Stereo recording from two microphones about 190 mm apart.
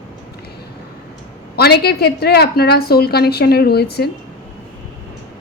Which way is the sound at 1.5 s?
55° left (ahead or behind).